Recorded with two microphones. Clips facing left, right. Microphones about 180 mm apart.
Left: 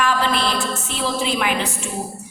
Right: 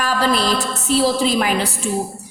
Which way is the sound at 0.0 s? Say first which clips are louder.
Right 2 dB; 40° right (ahead or behind).